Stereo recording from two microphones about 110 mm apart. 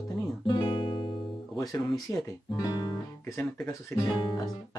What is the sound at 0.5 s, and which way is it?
Guitar, 50° left (ahead or behind).